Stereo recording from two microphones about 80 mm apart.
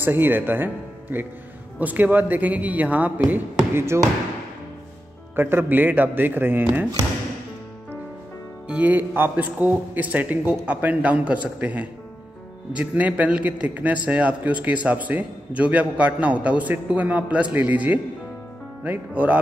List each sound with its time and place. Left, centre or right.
0.0 s a man's voice: right
3.7 s speech: right
5.3 s a man's voice: right
8.6 s a man's voice: right